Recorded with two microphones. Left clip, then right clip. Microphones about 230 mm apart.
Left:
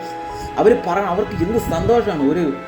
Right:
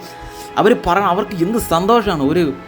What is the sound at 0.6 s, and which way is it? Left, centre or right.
Speech, right.